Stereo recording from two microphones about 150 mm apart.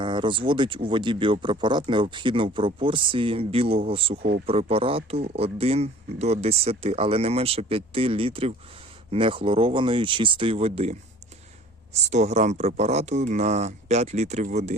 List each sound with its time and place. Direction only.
0.0 s speech: 35° right (ahead or behind)
12.0 s speech: 50° right (ahead or behind)